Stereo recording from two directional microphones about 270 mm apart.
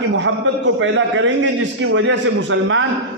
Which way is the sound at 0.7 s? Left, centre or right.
Right.